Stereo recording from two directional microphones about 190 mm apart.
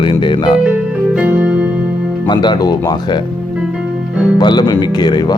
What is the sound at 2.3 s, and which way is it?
Speech, 25° left (ahead or behind).